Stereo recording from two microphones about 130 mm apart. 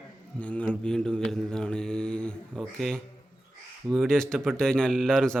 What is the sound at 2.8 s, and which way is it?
Speech, 5° left (ahead or behind).